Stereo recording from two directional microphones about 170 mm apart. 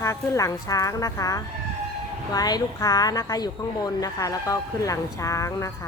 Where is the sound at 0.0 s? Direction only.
20° left (ahead or behind).